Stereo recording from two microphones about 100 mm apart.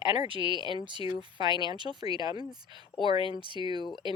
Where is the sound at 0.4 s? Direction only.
55° left (ahead or behind).